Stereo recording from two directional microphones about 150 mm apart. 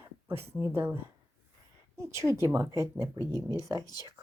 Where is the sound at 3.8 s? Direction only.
25° left (ahead or behind).